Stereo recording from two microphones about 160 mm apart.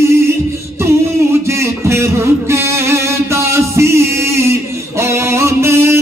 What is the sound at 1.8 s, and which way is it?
Music, 15° right (ahead or behind).